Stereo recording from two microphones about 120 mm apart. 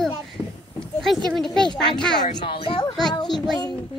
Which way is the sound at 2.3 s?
45° left (ahead or behind).